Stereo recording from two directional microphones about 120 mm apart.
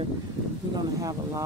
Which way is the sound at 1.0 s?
30° right (ahead or behind).